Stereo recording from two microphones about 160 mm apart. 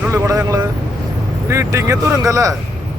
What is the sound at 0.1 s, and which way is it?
Vehicle, 20° right (ahead or behind).